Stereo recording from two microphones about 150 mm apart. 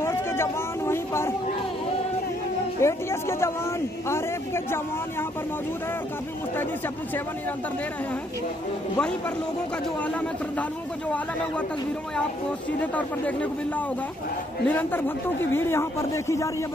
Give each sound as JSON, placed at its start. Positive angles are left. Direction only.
{"t": 0.0, "sound": "a sound", "side_deg": 15}
{"t": 2.8, "sound": "speech", "side_deg": 20}
{"t": 12.8, "sound": "speech", "side_deg": 10}